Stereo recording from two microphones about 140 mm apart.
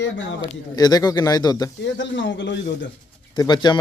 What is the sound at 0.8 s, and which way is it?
Speech, 30° left (ahead or behind).